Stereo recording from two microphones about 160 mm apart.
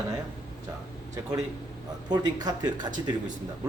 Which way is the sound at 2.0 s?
25° right (ahead or behind).